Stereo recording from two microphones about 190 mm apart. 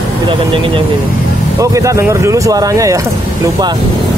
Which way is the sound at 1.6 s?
15° right (ahead or behind).